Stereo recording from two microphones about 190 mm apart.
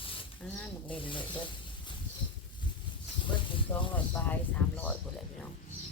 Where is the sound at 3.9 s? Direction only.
10° left (ahead or behind).